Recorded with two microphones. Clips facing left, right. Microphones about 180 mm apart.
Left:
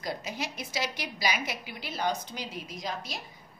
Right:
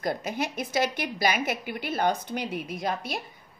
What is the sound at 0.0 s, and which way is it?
A woman's voice, 55° right (ahead or behind).